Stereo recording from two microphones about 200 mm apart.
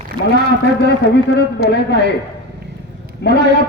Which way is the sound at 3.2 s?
60° left (ahead or behind).